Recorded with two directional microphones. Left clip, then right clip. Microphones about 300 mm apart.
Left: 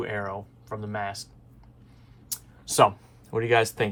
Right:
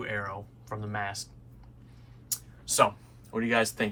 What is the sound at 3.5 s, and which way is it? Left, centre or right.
Speech, left.